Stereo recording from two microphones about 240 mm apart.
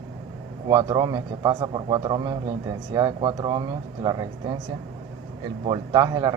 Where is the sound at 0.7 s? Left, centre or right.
Centre.